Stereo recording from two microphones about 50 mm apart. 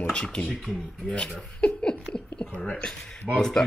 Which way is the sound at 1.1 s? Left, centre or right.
Left.